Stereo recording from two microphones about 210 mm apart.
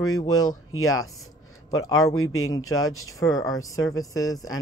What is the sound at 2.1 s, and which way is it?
Speech, 80° left.